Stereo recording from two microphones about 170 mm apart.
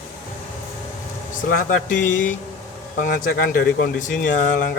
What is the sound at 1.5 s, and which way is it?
Speech, 55° left (ahead or behind).